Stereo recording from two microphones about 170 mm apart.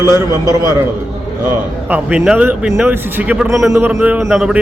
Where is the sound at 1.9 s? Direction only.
5° right (ahead or behind).